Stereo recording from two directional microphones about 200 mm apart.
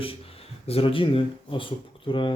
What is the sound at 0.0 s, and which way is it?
Speech, 30° left (ahead or behind).